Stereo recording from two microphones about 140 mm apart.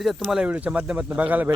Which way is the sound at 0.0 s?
Centre (ahead or behind).